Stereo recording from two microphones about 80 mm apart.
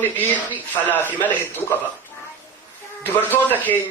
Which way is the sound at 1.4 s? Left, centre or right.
Left.